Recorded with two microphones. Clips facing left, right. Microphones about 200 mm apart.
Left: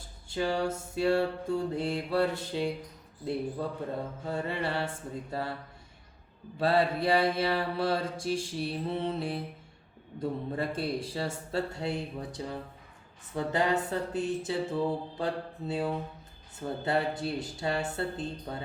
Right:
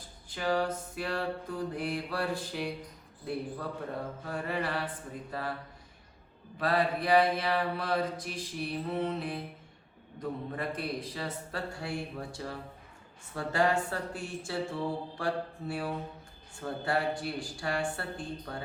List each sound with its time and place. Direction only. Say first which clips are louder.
0.3 s mantra: left 1 dB; 25° left (ahead or behind)
4.3 s mantra: left 2 dB; 25° left (ahead or behind)
6.6 s mantra: left 3 dB; 30° left (ahead or behind)